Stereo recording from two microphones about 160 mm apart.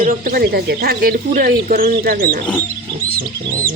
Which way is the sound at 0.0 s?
65° right (ahead or behind).